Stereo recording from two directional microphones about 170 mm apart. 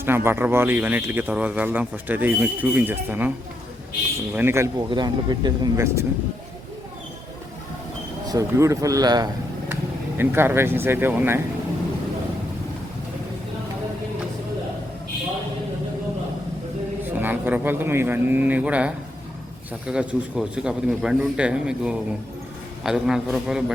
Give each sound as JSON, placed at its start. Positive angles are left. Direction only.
{"t": 0.0, "sound": "speech", "side_deg": -15}
{"t": 4.4, "sound": "speech", "side_deg": -15}
{"t": 8.3, "sound": "speech", "side_deg": -20}
{"t": 10.2, "sound": "speech", "side_deg": -15}
{"t": 17.0, "sound": "speech", "side_deg": -10}